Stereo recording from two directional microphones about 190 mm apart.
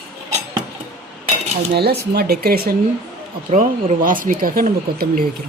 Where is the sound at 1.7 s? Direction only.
55° right (ahead or behind).